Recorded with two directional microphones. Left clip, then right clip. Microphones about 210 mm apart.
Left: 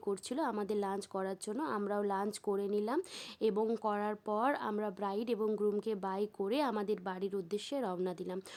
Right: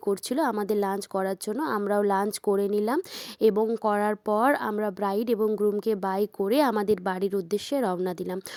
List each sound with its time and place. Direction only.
0.0 s a woman's voice: 30° right (ahead or behind)